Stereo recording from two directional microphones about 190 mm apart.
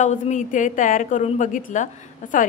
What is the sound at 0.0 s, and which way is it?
A woman's voice, 40° left (ahead or behind).